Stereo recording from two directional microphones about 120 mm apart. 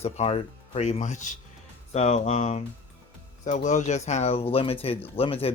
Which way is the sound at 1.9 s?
65° left (ahead or behind).